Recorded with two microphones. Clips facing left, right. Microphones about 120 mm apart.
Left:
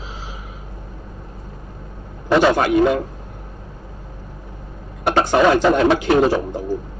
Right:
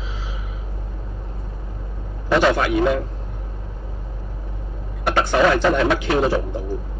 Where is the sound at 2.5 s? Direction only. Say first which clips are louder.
Left 3 dB; 40° left (ahead or behind).